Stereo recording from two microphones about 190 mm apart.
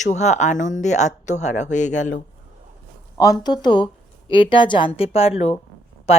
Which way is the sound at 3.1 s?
20° left (ahead or behind).